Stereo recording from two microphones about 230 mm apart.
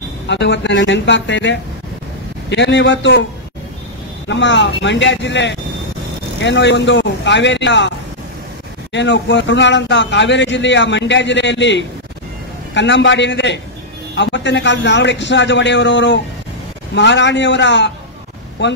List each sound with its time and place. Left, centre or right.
0.3 s speech: left
4.3 s speech: left
8.9 s speech: left